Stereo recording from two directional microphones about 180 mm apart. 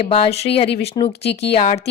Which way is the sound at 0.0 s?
35° left (ahead or behind).